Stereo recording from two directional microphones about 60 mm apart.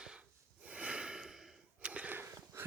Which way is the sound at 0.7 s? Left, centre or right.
Centre.